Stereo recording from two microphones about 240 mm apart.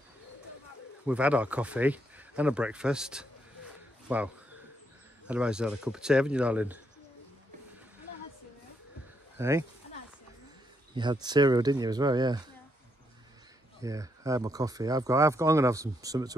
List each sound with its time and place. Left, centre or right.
1.0 s speech: centre
9.4 s speech: centre
11.0 s speech: centre
13.7 s speech: centre